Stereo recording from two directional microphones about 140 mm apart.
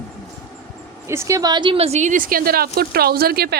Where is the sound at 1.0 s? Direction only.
20° right (ahead or behind); by 3.5 s 90° right.